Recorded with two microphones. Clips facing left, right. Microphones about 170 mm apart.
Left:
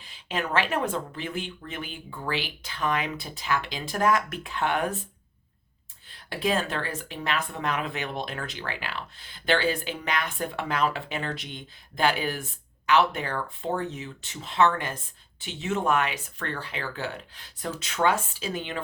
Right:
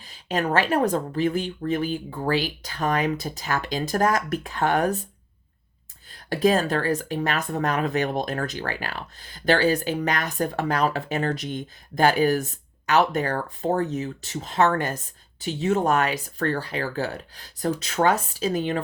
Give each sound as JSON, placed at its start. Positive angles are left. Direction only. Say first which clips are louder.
{"t": 0.0, "sound": "speech", "louder": "right 6 dB", "side_deg": -40}
{"t": 6.1, "sound": "speech", "louder": "right 7 dB", "side_deg": -40}